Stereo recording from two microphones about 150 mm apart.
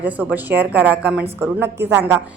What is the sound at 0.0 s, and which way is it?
A woman's voice, 10° right (ahead or behind).